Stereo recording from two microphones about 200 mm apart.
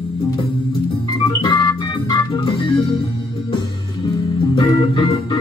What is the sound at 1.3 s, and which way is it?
Organ, 20° left (ahead or behind).